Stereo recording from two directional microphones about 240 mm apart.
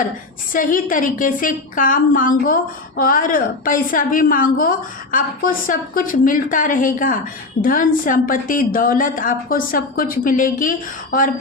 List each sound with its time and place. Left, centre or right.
0.5 s a woman's voice: left